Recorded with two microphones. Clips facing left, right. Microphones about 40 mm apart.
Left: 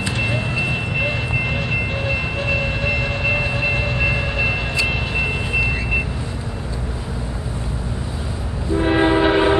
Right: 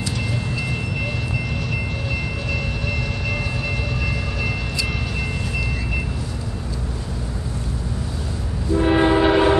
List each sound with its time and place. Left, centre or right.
0.2 s train: left
8.7 s train: centre